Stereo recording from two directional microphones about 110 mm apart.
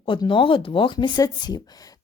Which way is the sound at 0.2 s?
50° left (ahead or behind).